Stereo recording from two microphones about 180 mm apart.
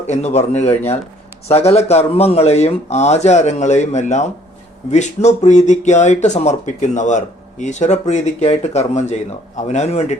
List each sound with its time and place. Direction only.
0.1 s speech: 40° left (ahead or behind)